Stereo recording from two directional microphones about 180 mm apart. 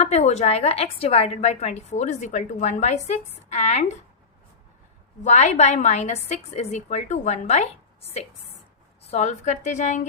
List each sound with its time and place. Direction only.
0.0 s a woman's voice: 35° left (ahead or behind)
5.2 s a woman's voice: 40° left (ahead or behind)
9.0 s a woman's voice: 40° left (ahead or behind)